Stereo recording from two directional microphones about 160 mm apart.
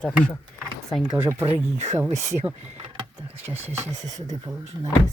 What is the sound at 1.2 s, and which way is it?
Speech, 15° right (ahead or behind).